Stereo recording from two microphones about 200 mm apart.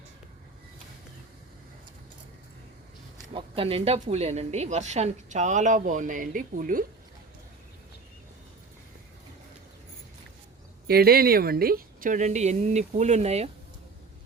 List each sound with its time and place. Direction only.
3.3 s speech: 25° right (ahead or behind); by 6.8 s 40° right (ahead or behind)
10.8 s speech: 50° right (ahead or behind); by 13.5 s 30° right (ahead or behind)